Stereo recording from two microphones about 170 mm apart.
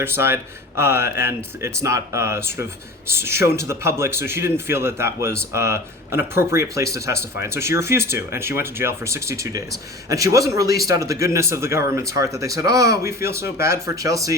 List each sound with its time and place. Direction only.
0.0 s a man's voice: 15° right (ahead or behind)